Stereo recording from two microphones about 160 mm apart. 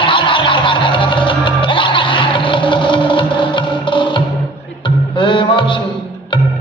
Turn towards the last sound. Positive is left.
turn(degrees=30)  # may be behind; listen again after turning